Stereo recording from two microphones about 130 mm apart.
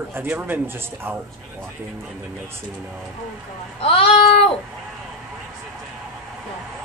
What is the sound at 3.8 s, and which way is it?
Child singing, 45° left (ahead or behind).